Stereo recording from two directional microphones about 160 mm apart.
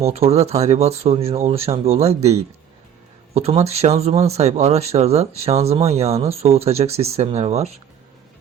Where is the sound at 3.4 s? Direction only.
40° right (ahead or behind).